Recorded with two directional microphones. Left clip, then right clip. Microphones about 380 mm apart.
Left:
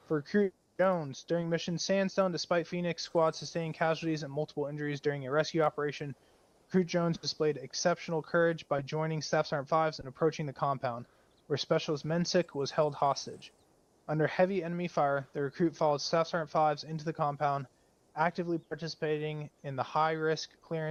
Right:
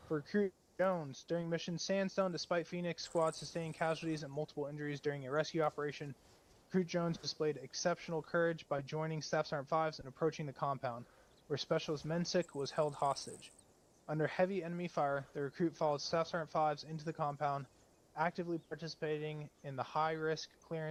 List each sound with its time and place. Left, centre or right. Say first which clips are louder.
0.1 s speech: left 6 dB; centre